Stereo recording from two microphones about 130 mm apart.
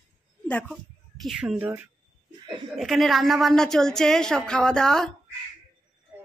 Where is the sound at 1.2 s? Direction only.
5° right (ahead or behind).